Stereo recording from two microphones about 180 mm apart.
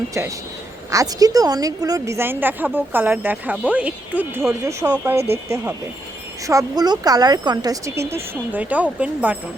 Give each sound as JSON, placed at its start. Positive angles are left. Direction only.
{"t": 0.1, "sound": "a woman's voice", "side_deg": -15}
{"t": 6.5, "sound": "speech", "side_deg": -20}